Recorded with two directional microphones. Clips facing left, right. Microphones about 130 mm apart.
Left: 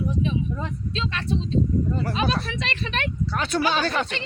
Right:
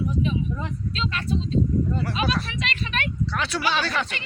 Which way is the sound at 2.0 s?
40° left (ahead or behind).